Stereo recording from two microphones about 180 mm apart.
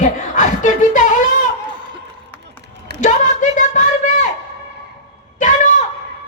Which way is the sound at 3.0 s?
45° left (ahead or behind).